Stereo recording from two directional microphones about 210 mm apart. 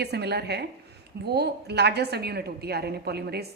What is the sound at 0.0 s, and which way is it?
A woman's voice, 50° right (ahead or behind).